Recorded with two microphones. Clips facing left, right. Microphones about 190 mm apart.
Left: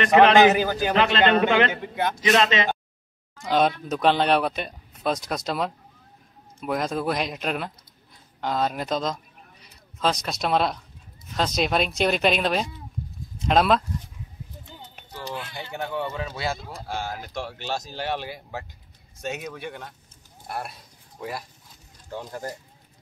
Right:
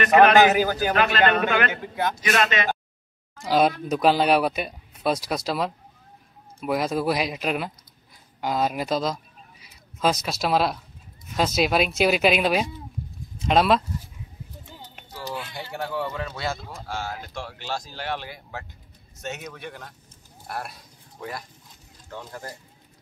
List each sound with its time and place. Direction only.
0.0 s speech: 25° left (ahead or behind)
0.5 s a man's voice: 5° right (ahead or behind)
0.9 s speech: 25° left (ahead or behind)
3.4 s speech: 5° right (ahead or behind)
8.4 s a sound: 10° right (ahead or behind)
10.2 s speech: 5° right (ahead or behind)
15.3 s speech: 5° right (ahead or behind)
17.3 s speech: 15° left (ahead or behind)